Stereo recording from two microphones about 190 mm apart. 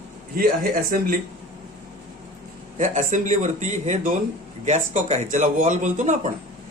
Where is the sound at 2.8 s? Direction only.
40° right (ahead or behind).